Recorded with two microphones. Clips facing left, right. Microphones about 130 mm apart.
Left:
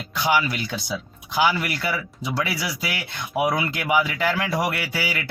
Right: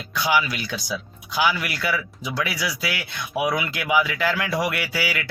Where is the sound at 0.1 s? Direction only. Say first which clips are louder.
Even; 25° left (ahead or behind).